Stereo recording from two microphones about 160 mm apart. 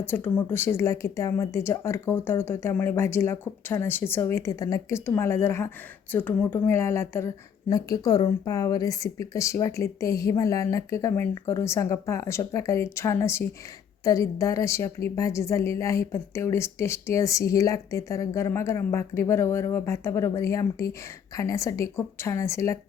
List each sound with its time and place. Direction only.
0.0 s a woman's voice: 15° left (ahead or behind)